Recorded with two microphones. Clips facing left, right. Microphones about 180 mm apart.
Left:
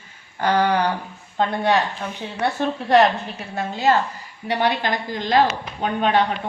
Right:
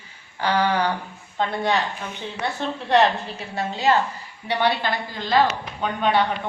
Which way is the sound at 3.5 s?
45° left (ahead or behind).